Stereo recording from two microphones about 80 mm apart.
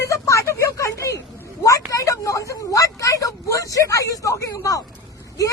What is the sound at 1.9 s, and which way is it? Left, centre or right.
Vehicle, left.